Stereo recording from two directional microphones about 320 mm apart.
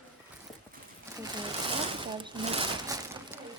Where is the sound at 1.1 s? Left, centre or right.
Centre.